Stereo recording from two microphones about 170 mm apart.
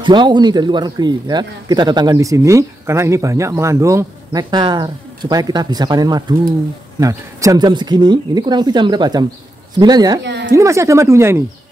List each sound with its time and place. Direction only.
0.0 s speech: 25° right (ahead or behind)
10.2 s a woman's voice: 90° right
10.5 s speech: 15° right (ahead or behind)